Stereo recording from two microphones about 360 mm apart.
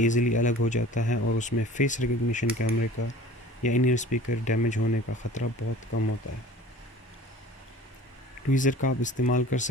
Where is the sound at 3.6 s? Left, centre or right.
Left.